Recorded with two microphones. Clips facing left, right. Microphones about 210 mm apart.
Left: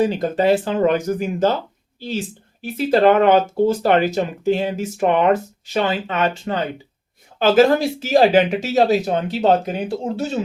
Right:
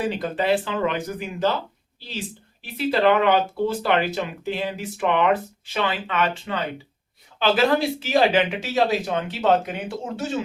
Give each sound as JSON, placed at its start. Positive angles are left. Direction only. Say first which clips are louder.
{"t": 0.0, "sound": "speech", "louder": "left 7 dB", "side_deg": 40}